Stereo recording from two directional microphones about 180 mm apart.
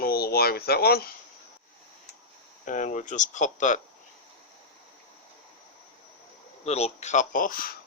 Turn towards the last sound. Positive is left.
turn(degrees=50)  # may be behind; listen again after turning